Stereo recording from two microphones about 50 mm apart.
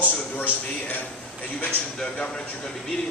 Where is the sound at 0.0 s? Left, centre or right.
Left.